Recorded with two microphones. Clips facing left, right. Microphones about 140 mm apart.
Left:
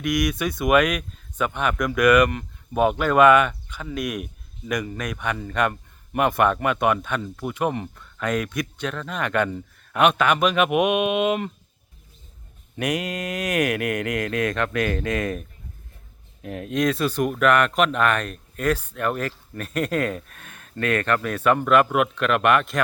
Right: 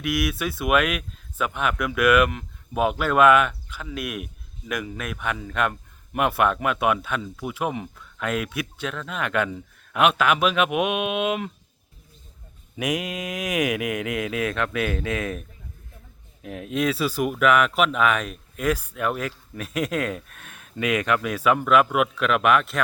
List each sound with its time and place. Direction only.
0.0 s speech: 5° right (ahead or behind)
12.7 s speech: 5° right (ahead or behind)